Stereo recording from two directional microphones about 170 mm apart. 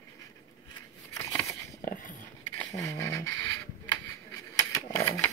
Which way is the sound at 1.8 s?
60° left (ahead or behind).